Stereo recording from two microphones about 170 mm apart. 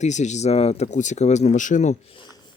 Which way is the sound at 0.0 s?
45° left (ahead or behind).